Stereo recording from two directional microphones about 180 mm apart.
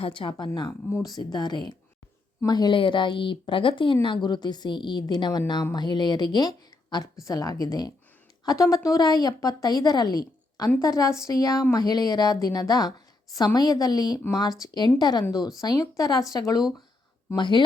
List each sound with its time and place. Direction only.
0.0 s speech: 30° left (ahead or behind)
0.7 s speech: 15° left (ahead or behind)